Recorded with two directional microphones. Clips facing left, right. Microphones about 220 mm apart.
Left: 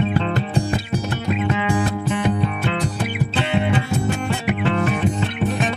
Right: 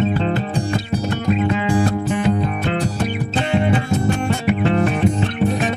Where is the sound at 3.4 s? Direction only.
45° right (ahead or behind).